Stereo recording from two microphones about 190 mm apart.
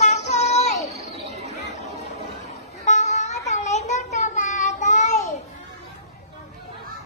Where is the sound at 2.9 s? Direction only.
40° left (ahead or behind).